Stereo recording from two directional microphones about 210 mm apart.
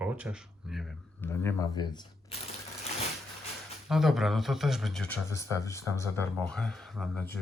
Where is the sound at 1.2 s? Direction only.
10° left (ahead or behind).